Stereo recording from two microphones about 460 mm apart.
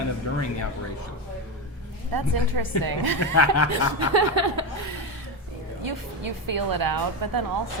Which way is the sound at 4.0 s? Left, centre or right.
Right.